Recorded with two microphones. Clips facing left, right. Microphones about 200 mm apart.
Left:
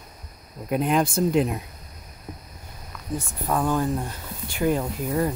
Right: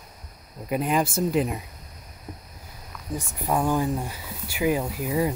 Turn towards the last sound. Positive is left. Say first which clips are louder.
# even
turn(degrees=-5)  # may be behind; listen again after turning